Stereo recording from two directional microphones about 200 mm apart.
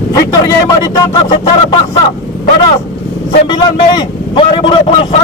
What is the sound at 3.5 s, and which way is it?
A man's voice, 25° left (ahead or behind).